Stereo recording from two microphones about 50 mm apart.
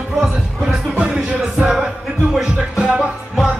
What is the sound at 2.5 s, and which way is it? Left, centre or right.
Music, centre.